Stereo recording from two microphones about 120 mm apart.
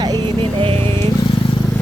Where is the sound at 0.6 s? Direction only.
50° right (ahead or behind).